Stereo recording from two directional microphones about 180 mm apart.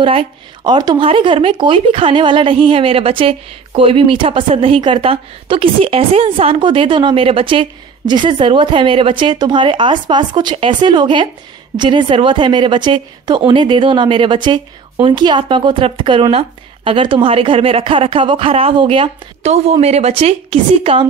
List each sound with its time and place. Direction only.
0.0 s speech: 30° right (ahead or behind)